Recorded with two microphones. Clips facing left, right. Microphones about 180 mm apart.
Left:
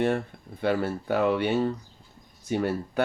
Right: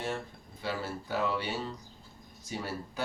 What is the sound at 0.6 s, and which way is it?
Speech, 60° left (ahead or behind).